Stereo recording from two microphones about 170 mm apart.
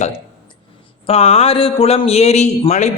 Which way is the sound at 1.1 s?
35° left (ahead or behind).